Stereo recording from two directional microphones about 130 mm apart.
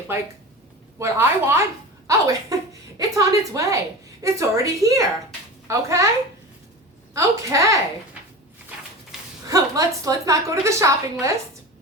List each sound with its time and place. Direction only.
0.9 s a woman's voice: 20° right (ahead or behind)
7.1 s a woman's voice: 25° right (ahead or behind)
9.5 s a woman's voice: 25° right (ahead or behind)